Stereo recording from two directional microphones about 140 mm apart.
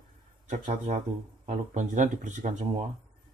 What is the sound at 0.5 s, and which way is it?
Speech, 55° right (ahead or behind).